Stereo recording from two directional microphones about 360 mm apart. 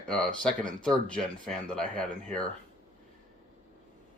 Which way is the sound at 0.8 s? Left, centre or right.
Centre.